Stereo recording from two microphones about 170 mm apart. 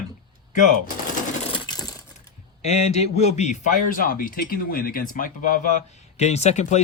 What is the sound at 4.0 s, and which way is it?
Speech, 55° left (ahead or behind).